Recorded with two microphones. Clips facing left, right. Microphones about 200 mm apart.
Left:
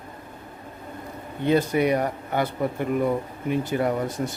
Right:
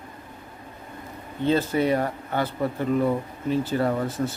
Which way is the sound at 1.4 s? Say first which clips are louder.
Left 1 dB; 15° left (ahead or behind).